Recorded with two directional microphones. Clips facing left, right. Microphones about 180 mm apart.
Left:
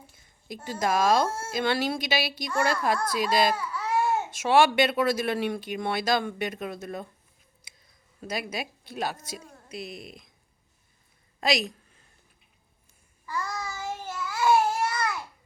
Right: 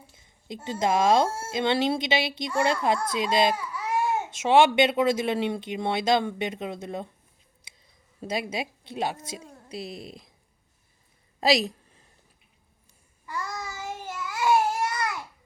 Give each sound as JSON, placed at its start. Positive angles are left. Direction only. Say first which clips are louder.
{"t": 0.1, "sound": "a woman's voice", "louder": "right 2 dB", "side_deg": -25}
{"t": 8.2, "sound": "speech", "louder": "right 3 dB", "side_deg": -25}
{"t": 11.3, "sound": "a sound", "louder": "right 4 dB", "side_deg": -30}
{"t": 13.2, "sound": "babbling", "louder": "left 1 dB", "side_deg": -20}